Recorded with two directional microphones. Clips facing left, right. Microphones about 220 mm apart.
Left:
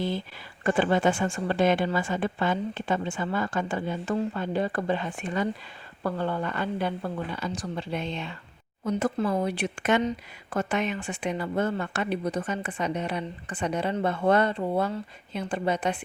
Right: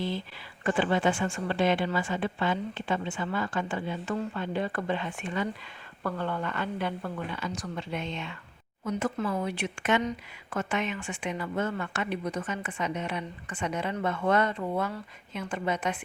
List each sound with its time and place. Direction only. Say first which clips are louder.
0.6 s a woman's voice: left 3 dB; 45° left (ahead or behind)